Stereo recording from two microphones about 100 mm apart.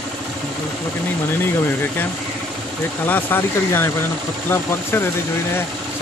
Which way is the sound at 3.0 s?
20° left (ahead or behind).